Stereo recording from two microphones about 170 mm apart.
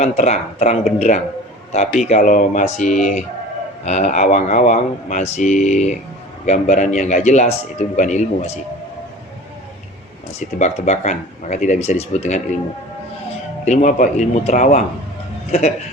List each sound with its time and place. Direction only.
0.0 s speech: 40° left (ahead or behind)
10.6 s speech: 45° left (ahead or behind)
13.7 s speech: 45° left (ahead or behind)